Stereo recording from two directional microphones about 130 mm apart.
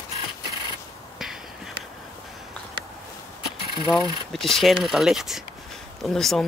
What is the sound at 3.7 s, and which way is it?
Speech, 40° left (ahead or behind).